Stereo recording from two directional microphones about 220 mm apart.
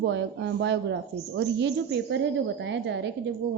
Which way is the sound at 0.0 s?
55° right (ahead or behind).